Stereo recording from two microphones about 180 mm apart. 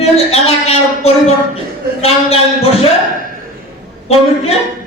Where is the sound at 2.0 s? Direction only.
35° left (ahead or behind).